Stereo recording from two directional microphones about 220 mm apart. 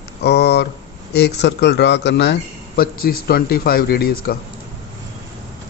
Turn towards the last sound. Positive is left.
turn(degrees=45)  # may be behind; listen again after turning